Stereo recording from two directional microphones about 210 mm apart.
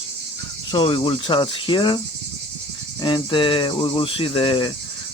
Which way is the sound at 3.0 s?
20° left (ahead or behind).